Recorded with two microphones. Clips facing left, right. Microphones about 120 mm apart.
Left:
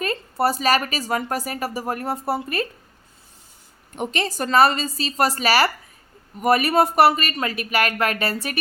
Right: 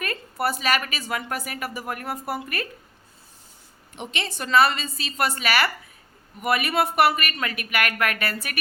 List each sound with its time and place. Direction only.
0.0 s a woman's voice: 30° left (ahead or behind)
3.9 s a woman's voice: 40° left (ahead or behind)